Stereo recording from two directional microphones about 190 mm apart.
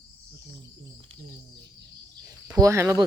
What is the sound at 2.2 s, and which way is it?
Speech, 15° right (ahead or behind).